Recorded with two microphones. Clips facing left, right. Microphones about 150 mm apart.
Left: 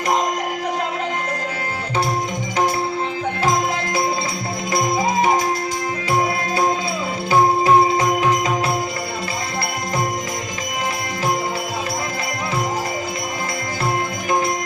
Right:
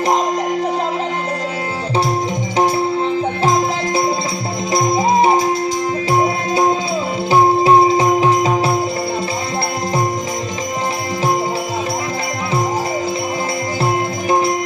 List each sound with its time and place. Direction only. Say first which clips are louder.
7.3 s music: right 3 dB; 25° right (ahead or behind)